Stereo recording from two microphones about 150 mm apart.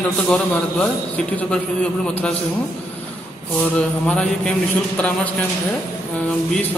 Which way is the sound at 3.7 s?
5° left (ahead or behind).